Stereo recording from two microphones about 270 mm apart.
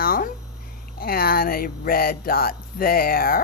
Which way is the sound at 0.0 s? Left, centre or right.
Left.